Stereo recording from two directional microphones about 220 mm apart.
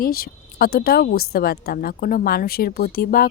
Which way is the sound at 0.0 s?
40° left (ahead or behind).